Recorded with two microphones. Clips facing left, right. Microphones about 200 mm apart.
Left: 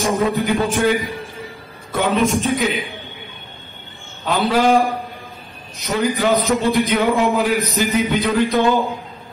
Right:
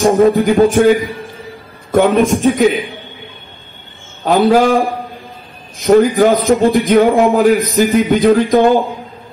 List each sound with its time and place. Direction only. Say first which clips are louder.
0.2 s speech: right 9 dB; 50° right (ahead or behind)
4.2 s speech: right 7 dB; 50° right (ahead or behind)